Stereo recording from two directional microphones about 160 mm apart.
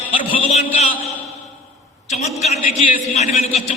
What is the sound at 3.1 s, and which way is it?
Speech, 45° left (ahead or behind).